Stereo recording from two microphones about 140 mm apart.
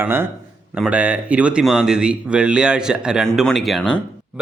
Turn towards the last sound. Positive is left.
turn(degrees=0)  # may be behind; listen again after turning